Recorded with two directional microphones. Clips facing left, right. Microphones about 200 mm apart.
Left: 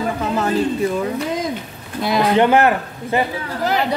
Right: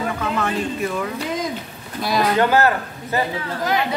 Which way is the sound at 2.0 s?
25° left (ahead or behind).